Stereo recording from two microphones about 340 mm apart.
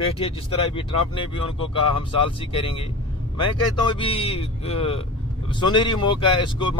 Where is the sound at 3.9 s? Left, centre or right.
Centre.